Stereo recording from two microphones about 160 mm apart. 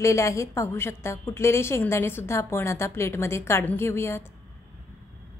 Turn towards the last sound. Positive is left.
turn(degrees=15)  # may be behind; listen again after turning